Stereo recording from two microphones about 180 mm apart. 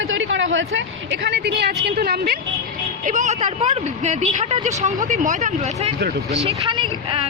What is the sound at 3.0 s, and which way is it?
Speech, 40° right (ahead or behind).